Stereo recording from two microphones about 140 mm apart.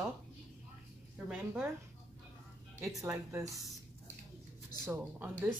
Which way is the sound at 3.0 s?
20° right (ahead or behind).